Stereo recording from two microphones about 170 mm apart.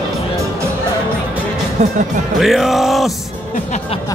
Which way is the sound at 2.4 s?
Centre (ahead or behind).